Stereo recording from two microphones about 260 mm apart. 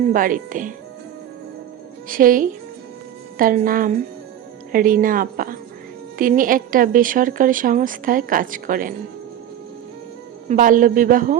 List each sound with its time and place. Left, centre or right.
0.1 s a woman's voice: right
2.0 s a woman's voice: right
10.5 s a woman's voice: right